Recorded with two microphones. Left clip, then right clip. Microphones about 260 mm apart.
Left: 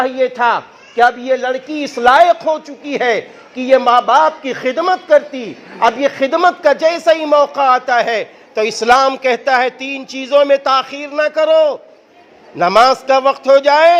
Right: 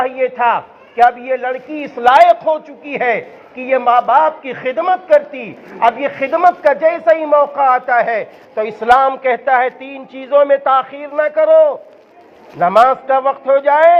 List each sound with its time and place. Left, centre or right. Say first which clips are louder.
0.0 s a man's voice: left 1 dB; left